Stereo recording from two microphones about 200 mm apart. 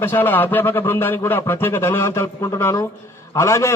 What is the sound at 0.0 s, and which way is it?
A man's voice, 10° left (ahead or behind).